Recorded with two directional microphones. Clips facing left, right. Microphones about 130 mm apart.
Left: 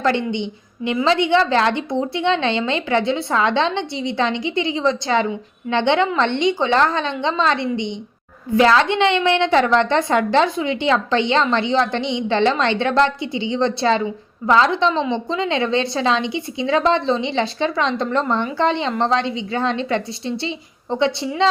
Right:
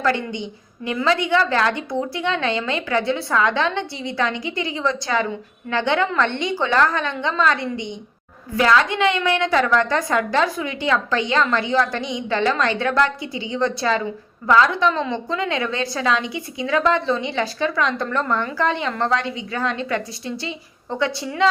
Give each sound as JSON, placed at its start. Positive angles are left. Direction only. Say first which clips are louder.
{"t": 0.0, "sound": "a woman's voice", "louder": "left 2 dB", "side_deg": 25}